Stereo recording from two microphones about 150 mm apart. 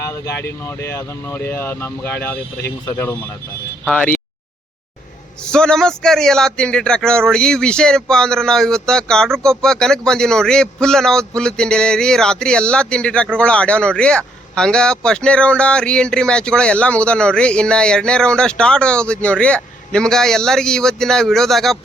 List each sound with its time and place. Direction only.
0.0 s speech: 20° left (ahead or behind)
5.4 s speech: 5° left (ahead or behind)